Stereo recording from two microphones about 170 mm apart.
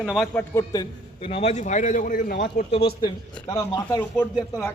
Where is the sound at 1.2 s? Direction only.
35° left (ahead or behind); by 2.7 s 65° left (ahead or behind).